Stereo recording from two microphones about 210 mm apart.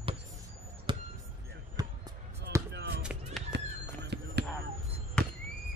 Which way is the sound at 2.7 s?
50° right (ahead or behind).